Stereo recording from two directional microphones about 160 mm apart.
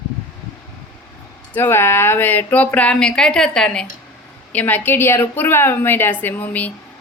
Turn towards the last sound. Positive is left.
turn(degrees=10)  # may be behind; listen again after turning